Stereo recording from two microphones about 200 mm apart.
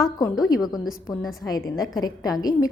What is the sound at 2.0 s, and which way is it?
Speech, 20° left (ahead or behind).